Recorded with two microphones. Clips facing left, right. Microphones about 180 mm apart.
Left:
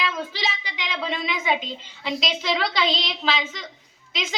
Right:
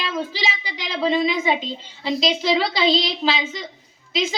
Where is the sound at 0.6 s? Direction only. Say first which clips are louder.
Right 6 dB; 35° right (ahead or behind).